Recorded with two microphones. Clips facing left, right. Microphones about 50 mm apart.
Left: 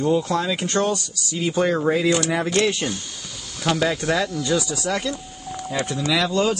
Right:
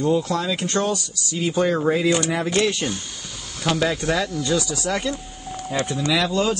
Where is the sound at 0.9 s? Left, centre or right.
Centre.